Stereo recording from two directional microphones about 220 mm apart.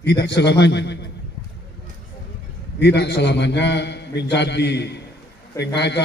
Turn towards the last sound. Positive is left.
turn(degrees=50)  # may be behind; listen again after turning